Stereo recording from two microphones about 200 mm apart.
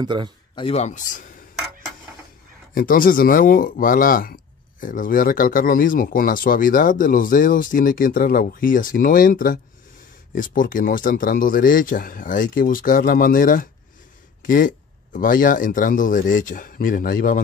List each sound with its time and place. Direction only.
0.0 s speech: 25° right (ahead or behind)
0.6 s speech: 30° left (ahead or behind)
2.7 s speech: 45° left (ahead or behind)